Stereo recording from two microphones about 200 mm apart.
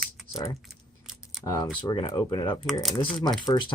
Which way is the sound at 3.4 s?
25° left (ahead or behind).